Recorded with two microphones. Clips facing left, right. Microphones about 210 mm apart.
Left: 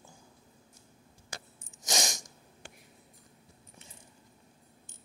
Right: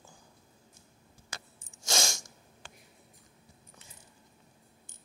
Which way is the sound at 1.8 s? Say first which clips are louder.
Even; 20° left (ahead or behind).